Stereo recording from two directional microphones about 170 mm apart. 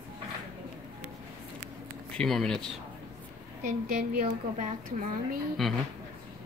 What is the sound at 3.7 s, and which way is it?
A woman's voice, 45° right (ahead or behind).